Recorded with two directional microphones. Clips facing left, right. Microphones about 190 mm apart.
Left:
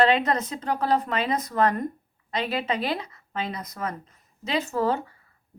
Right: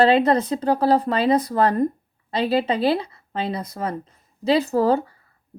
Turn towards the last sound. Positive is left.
turn(degrees=-35)  # may be behind; listen again after turning